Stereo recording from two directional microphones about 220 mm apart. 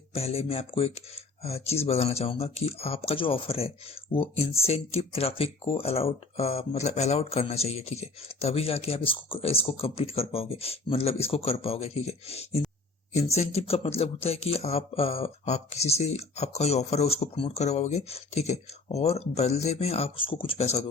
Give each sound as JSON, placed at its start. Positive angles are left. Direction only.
{"t": 0.1, "sound": "speech", "side_deg": 25}